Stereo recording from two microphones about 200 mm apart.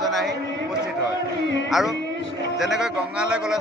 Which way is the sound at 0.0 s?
Centre (ahead or behind).